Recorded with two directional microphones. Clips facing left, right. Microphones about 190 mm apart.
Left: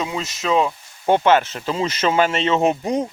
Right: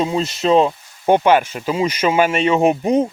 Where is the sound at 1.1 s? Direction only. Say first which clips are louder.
Right 2 dB; 15° right (ahead or behind).